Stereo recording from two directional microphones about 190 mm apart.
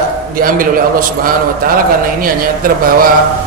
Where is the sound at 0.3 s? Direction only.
45° right (ahead or behind).